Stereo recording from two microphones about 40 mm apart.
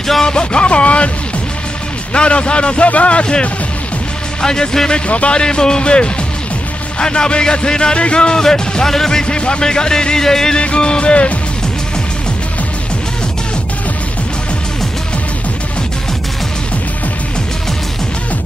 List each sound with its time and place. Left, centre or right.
0.2 s music: left
2.1 s speech: left
5.0 s speech: left; by 9.2 s centre
9.2 s speech: left
10.6 s speech: left